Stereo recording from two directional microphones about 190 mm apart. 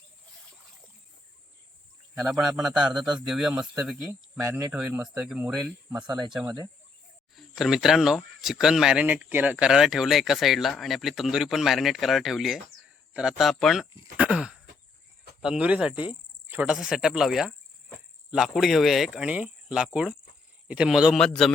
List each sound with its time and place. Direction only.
2.6 s speech: 5° right (ahead or behind)
4.4 s speech: 10° right (ahead or behind)
14.2 s a sound: 5° right (ahead or behind)
15.4 s speech: 5° right (ahead or behind)